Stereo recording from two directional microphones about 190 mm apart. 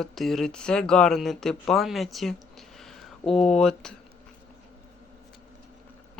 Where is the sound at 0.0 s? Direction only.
Centre (ahead or behind).